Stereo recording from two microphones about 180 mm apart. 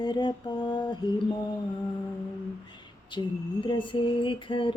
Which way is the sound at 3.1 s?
25° left (ahead or behind).